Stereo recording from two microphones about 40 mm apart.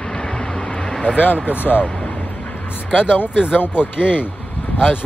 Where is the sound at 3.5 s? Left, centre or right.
Left.